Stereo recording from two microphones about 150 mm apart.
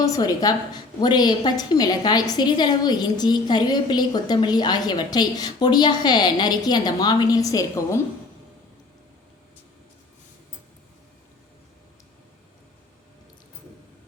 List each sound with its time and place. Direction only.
0.0 s a woman's voice: 25° left (ahead or behind)